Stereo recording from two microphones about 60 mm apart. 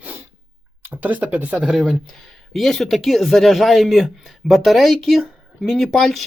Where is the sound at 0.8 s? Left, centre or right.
Right.